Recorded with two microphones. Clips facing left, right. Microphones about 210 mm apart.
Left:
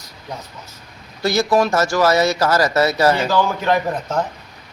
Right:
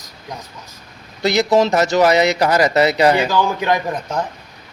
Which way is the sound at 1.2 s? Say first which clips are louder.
Right 2 dB; 20° right (ahead or behind).